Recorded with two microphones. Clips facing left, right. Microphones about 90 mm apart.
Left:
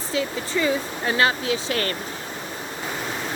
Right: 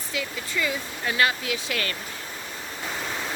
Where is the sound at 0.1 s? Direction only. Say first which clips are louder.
Left 6 dB; 30° left (ahead or behind).